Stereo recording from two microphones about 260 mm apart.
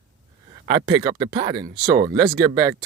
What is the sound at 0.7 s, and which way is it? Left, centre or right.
Speech, centre.